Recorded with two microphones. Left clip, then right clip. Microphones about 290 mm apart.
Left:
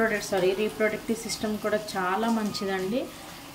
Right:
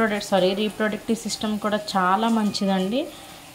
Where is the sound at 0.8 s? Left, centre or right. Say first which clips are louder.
Right 2 dB; centre.